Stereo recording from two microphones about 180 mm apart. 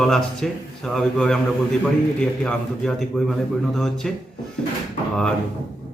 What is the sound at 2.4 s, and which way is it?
A man's voice, 5° left (ahead or behind).